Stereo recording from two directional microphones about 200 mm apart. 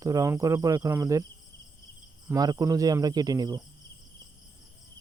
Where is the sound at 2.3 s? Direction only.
20° right (ahead or behind).